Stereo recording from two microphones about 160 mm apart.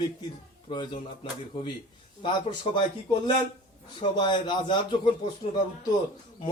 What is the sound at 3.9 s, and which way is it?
A man's voice, 30° left (ahead or behind).